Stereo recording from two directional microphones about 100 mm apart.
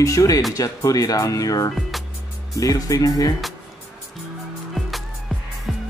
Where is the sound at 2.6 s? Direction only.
35° left (ahead or behind).